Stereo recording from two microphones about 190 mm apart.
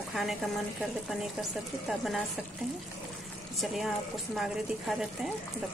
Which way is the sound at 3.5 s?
Centre (ahead or behind).